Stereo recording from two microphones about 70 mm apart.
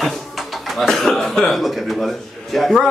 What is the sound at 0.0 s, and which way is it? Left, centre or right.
Speech, centre.